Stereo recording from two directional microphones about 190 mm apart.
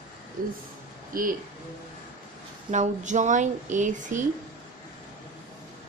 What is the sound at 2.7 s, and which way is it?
Speech, 40° right (ahead or behind).